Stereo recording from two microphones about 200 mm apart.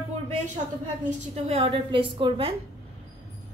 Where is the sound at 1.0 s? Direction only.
35° right (ahead or behind).